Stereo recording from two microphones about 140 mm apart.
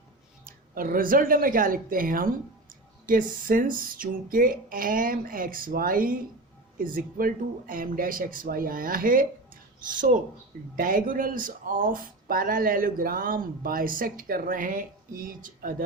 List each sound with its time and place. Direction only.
0.4 s speech: 90° right; by 15.7 s 75° right (ahead or behind)